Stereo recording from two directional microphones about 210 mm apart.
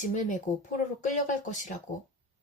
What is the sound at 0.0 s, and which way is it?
A woman's voice, 35° left (ahead or behind).